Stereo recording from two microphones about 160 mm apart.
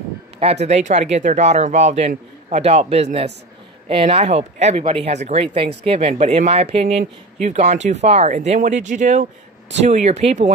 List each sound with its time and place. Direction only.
0.4 s speech: 40° right (ahead or behind)